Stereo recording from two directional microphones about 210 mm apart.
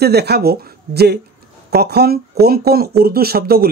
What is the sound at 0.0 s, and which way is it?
Speech, 50° right (ahead or behind).